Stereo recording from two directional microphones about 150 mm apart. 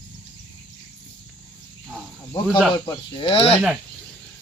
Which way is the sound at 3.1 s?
35° left (ahead or behind).